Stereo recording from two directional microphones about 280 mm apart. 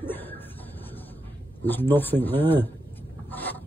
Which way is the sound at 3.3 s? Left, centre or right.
Centre.